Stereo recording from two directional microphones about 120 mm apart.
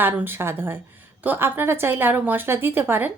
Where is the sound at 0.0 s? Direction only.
20° right (ahead or behind).